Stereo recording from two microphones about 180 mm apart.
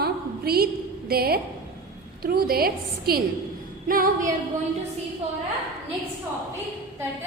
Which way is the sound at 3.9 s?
50° right (ahead or behind).